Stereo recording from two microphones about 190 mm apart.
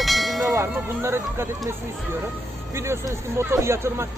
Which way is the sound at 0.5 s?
15° right (ahead or behind).